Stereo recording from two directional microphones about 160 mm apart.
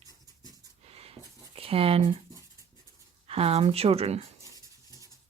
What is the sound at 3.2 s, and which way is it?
Speech, 40° right (ahead or behind).